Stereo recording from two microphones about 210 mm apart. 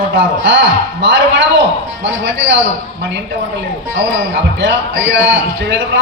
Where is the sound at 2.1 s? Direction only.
60° right (ahead or behind).